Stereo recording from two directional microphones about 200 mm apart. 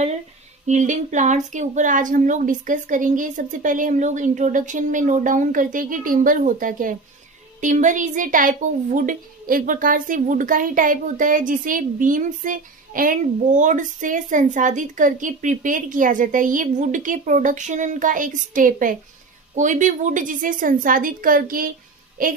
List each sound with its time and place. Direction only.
0.7 s a woman's voice: 40° right (ahead or behind)